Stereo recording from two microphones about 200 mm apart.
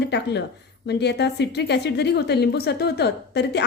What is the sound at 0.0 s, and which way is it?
A woman's voice, 60° left (ahead or behind).